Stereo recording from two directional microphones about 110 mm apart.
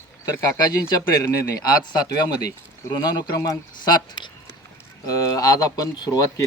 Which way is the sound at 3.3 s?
30° left (ahead or behind).